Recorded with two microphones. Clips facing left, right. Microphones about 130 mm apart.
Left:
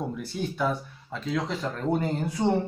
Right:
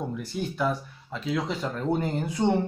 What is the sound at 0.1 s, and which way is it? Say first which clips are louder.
Speech: even; centre (ahead or behind).